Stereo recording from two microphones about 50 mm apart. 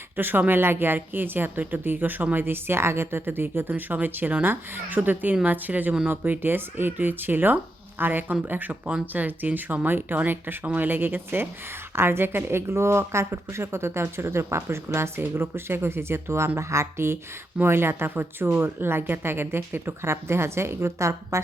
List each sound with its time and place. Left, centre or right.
0.2 s a woman's voice: right